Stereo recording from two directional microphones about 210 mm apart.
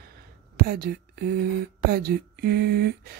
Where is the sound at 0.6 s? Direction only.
45° right (ahead or behind).